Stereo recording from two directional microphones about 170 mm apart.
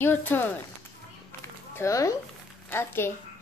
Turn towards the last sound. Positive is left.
turn(degrees=15)  # may be behind; listen again after turning